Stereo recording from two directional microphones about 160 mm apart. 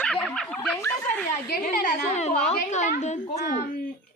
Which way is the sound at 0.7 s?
15° left (ahead or behind).